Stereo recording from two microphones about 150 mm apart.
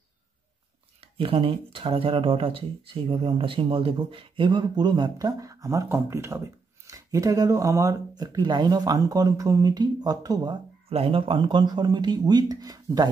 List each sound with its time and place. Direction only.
1.0 s speech: 35° right (ahead or behind)
10.9 s speech: 40° right (ahead or behind)